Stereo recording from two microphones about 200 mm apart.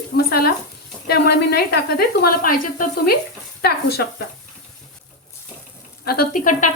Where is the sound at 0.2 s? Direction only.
50° left (ahead or behind).